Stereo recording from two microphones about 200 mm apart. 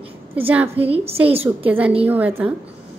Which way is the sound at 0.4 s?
10° right (ahead or behind).